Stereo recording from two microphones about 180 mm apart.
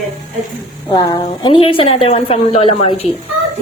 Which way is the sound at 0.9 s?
20° left (ahead or behind).